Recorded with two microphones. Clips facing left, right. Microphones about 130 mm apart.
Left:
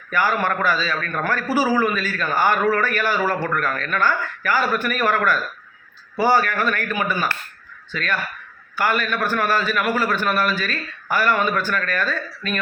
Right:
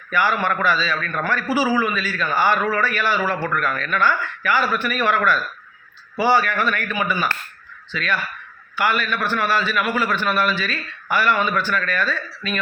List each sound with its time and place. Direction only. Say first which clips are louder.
0.1 s a man's voice: even; 45° left (ahead or behind)
7.9 s a man's voice: right 1 dB; 45° left (ahead or behind)